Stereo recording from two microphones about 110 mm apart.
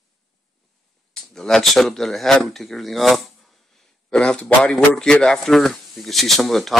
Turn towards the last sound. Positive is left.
turn(degrees=0)  # may be behind; listen again after turning